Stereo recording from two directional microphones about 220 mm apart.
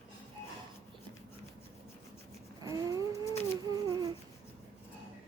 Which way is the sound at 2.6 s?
15° right (ahead or behind).